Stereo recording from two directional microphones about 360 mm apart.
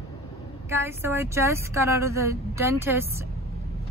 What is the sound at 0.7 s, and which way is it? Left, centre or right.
Speech, centre.